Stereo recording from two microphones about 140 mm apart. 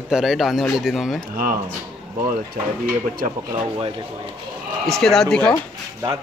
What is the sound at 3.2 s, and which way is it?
Speech, 75° right (ahead or behind).